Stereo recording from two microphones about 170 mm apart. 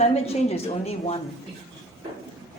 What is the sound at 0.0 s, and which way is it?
Speech, 40° left (ahead or behind).